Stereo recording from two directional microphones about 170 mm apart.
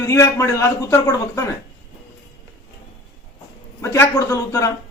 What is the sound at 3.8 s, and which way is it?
Speech, 15° left (ahead or behind).